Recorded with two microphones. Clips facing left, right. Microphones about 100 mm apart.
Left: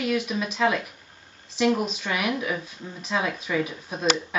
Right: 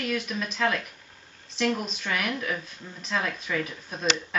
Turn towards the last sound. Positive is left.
turn(degrees=5)  # may be behind; listen again after turning